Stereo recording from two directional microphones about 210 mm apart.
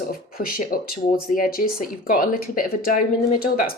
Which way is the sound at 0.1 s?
45° left (ahead or behind).